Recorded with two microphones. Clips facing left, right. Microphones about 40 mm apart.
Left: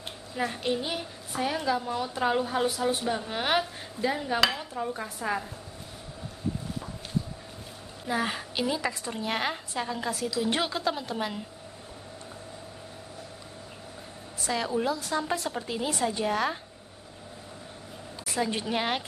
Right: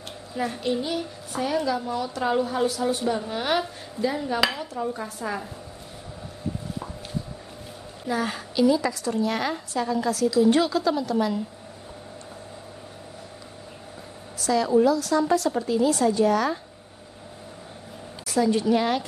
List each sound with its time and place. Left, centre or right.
0.6 s a woman's voice: left
4.6 s a sound: centre
5.0 s a woman's voice: centre
8.1 s a woman's voice: left
14.4 s a woman's voice: left
18.2 s a woman's voice: left